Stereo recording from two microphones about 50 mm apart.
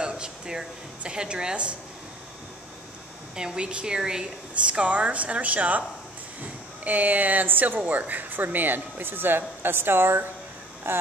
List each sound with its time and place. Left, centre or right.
0.0 s speech: centre
3.3 s speech: centre; by 11.0 s right